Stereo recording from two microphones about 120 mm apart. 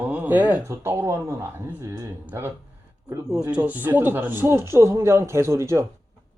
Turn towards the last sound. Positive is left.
turn(degrees=-25)  # may be behind; listen again after turning